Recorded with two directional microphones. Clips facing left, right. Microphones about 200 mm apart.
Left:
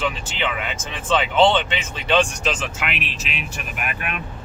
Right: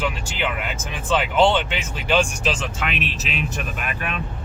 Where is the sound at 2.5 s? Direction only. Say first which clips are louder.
Even; centre (ahead or behind).